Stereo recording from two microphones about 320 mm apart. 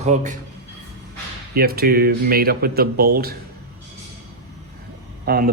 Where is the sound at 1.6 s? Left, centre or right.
Right.